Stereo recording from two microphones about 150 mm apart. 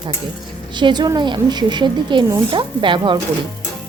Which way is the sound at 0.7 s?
30° right (ahead or behind).